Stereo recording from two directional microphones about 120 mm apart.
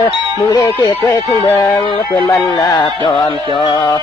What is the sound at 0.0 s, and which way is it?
Speech, 35° left (ahead or behind).